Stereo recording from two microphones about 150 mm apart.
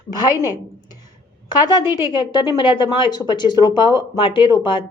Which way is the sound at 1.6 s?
30° left (ahead or behind).